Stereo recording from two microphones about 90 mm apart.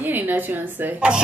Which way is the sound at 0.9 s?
10° right (ahead or behind).